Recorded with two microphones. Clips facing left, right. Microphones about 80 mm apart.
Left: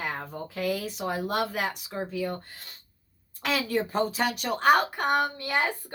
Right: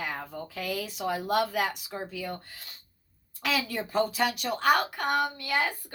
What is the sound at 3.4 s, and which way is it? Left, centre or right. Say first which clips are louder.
Speech: left 3 dB; left.